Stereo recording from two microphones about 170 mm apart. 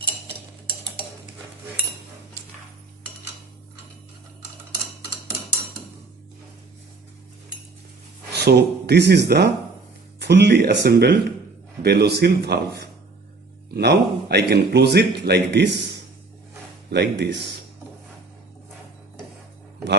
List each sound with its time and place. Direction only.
8.4 s speech: 75° right (ahead or behind)